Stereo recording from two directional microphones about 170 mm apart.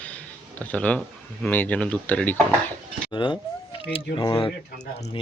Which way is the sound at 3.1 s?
30° left (ahead or behind).